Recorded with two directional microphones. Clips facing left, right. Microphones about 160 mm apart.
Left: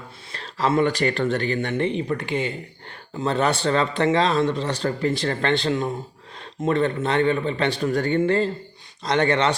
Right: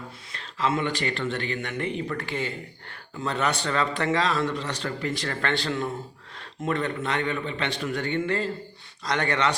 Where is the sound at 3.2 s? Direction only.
30° left (ahead or behind).